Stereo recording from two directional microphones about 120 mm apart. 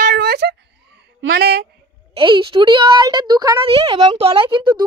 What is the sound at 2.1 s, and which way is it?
A woman's voice, 45° right (ahead or behind).